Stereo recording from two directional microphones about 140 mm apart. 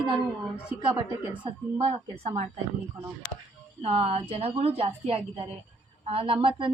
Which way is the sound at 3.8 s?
45° right (ahead or behind).